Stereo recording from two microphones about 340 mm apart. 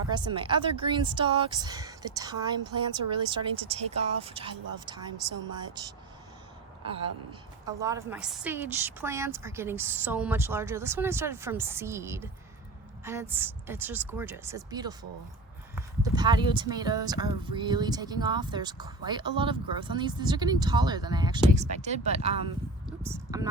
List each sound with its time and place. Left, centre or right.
0.1 s speech: centre
7.8 s speech: centre